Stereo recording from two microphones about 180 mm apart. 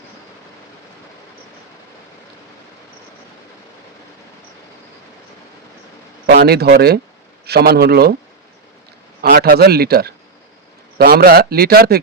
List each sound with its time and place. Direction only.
6.2 s a man's voice: 60° right (ahead or behind)
9.3 s a man's voice: 60° right (ahead or behind)